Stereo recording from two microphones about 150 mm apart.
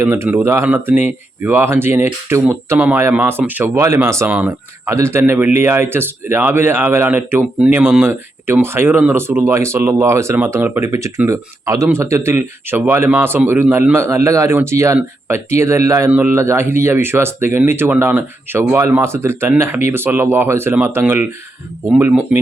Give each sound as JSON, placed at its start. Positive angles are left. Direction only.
{"t": 0.0, "sound": "speech", "side_deg": -15}